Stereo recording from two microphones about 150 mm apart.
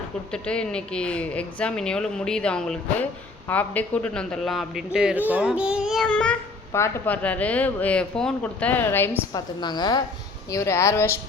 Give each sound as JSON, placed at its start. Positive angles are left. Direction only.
{"t": 0.4, "sound": "a child's voice", "side_deg": 5}
{"t": 6.1, "sound": "speech", "side_deg": 10}
{"t": 9.3, "sound": "a woman's voice", "side_deg": 30}